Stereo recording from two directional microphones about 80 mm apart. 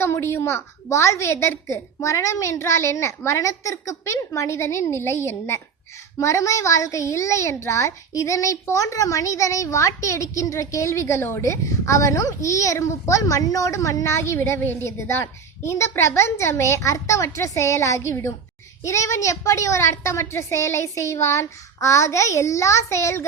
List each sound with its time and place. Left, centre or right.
0.0 s a woman's voice: left
6.1 s a woman's voice: left